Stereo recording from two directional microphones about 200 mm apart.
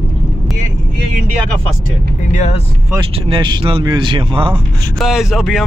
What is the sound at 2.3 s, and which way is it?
Speech, 35° left (ahead or behind).